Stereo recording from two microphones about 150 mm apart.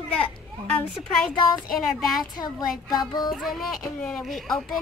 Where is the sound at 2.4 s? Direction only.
30° left (ahead or behind).